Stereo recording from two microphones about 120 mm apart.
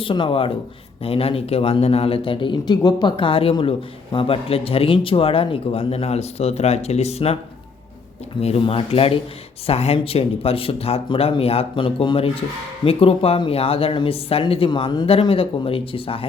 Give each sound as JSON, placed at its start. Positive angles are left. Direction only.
{"t": 0.0, "sound": "speech", "side_deg": 45}
{"t": 8.4, "sound": "speech", "side_deg": 55}